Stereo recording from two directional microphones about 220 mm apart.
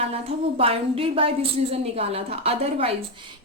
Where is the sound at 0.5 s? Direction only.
25° right (ahead or behind).